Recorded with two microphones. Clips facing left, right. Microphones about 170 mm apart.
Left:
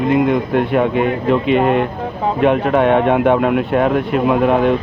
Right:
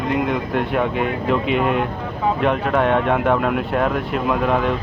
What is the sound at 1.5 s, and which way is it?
Speech, 55° left (ahead or behind).